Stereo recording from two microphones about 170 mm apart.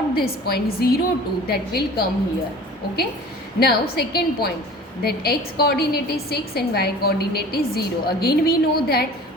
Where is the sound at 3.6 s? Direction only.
65° left (ahead or behind).